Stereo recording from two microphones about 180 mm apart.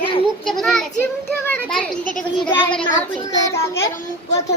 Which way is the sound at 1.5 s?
5° left (ahead or behind).